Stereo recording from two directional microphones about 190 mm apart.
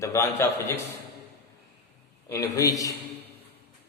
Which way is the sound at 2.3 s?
15° left (ahead or behind).